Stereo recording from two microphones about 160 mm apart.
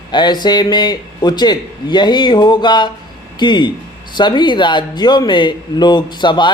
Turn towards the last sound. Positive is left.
turn(degrees=30)  # may be behind; listen again after turning